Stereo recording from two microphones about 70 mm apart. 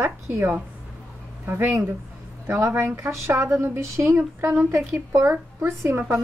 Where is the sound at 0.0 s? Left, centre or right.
Right.